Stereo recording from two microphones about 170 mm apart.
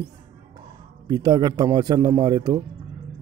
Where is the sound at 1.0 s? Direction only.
25° right (ahead or behind).